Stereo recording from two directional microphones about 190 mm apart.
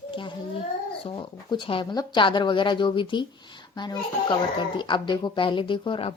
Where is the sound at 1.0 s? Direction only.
25° left (ahead or behind).